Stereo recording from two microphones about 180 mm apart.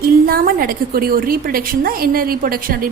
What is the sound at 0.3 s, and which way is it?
A woman's voice, 55° right (ahead or behind).